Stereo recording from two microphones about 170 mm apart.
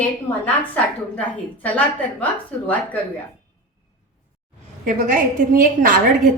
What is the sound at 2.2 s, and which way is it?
Speech, 10° left (ahead or behind).